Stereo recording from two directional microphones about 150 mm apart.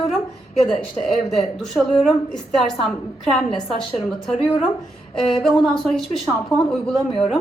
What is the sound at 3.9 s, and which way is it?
Speech, 35° left (ahead or behind).